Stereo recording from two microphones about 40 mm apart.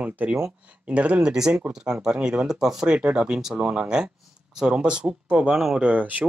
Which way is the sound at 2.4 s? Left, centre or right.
Centre.